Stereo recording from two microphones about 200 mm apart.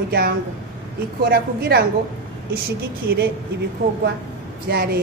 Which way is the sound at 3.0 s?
50° right (ahead or behind).